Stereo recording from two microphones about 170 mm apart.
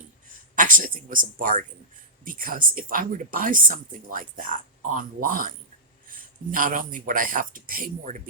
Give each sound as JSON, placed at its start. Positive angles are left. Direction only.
{"t": 0.5, "sound": "speech", "side_deg": -50}